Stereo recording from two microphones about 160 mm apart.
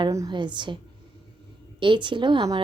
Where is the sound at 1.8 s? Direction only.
30° right (ahead or behind).